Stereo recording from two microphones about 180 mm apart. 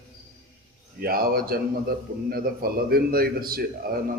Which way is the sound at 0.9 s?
55° right (ahead or behind).